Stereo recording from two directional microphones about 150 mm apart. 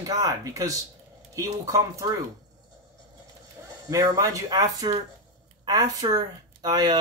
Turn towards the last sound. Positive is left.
turn(degrees=-30)  # may be behind; listen again after turning